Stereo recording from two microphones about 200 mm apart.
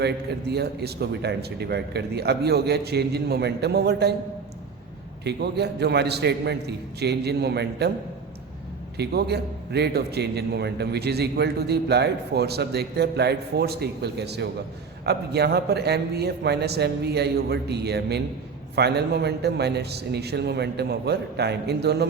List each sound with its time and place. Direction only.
0.0 s a man's voice: 55° right (ahead or behind)
5.2 s a man's voice: 55° right (ahead or behind)
9.0 s a man's voice: 55° right (ahead or behind)